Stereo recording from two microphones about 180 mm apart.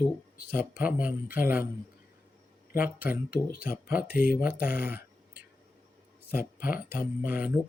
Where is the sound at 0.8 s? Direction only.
10° right (ahead or behind).